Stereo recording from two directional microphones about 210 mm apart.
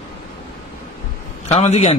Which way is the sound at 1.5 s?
30° left (ahead or behind).